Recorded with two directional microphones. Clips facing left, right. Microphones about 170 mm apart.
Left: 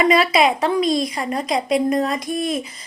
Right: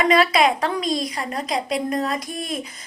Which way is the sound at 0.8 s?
40° right (ahead or behind).